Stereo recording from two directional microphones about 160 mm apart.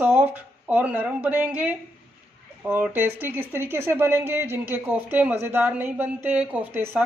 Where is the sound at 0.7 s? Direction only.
10° right (ahead or behind).